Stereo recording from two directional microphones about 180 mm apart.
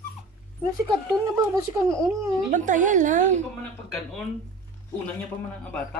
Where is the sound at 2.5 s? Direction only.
45° right (ahead or behind).